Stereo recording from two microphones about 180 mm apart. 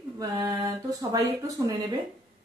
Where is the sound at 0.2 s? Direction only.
20° right (ahead or behind).